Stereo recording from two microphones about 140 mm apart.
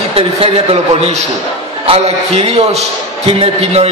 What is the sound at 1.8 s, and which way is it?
A man's voice, 45° right (ahead or behind).